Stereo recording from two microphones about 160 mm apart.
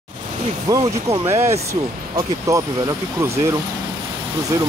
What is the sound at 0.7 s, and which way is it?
Speech, 20° right (ahead or behind).